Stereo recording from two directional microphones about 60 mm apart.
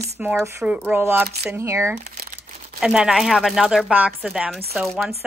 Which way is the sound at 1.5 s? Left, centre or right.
Right.